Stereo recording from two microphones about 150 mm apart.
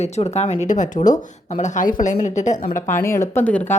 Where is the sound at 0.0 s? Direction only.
45° left (ahead or behind).